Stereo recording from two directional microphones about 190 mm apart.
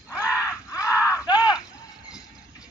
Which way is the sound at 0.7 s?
15° left (ahead or behind).